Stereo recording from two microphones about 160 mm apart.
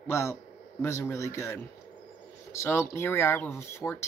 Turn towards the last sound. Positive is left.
turn(degrees=15)  # may be behind; listen again after turning